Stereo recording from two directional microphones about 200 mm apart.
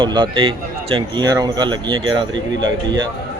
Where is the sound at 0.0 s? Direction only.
25° right (ahead or behind).